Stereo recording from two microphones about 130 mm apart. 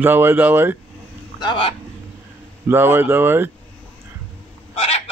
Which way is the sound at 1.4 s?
40° left (ahead or behind).